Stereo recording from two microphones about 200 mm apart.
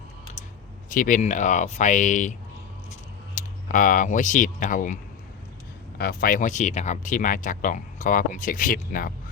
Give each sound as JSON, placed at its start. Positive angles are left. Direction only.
{"t": 0.9, "sound": "speech", "side_deg": 40}
{"t": 3.3, "sound": "speech", "side_deg": 40}
{"t": 6.0, "sound": "speech", "side_deg": 45}